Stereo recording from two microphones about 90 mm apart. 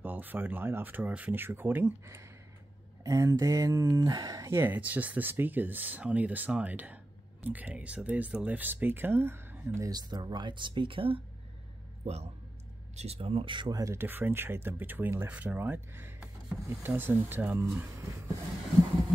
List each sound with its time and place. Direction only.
0.0 s speech: 20° right (ahead or behind)
3.0 s speech: 40° right (ahead or behind)
4.5 s speech: 25° right (ahead or behind)
9.8 s speech: 50° right (ahead or behind); by 11.2 s 85° right
13.1 s speech: 90° right
13.7 s speech: 40° right (ahead or behind)
13.9 s speech: 25° right (ahead or behind)